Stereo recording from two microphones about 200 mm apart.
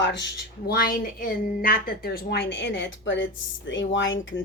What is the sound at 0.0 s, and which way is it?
Speech, 60° left (ahead or behind).